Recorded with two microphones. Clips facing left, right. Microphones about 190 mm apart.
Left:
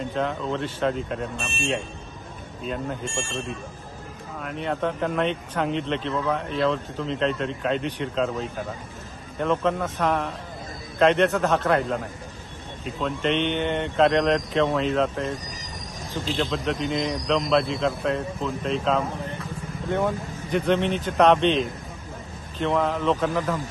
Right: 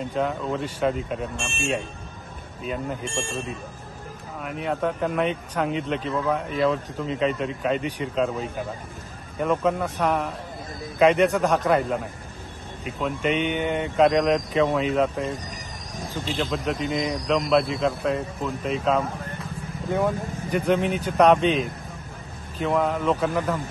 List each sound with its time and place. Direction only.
0.1 s speech: 5° right (ahead or behind)